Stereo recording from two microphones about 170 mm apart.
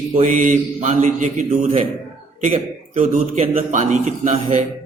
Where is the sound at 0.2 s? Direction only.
50° right (ahead or behind).